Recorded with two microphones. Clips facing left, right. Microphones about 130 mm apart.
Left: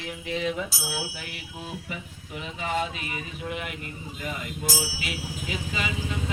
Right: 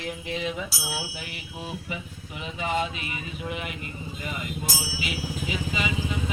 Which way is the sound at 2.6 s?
Centre (ahead or behind).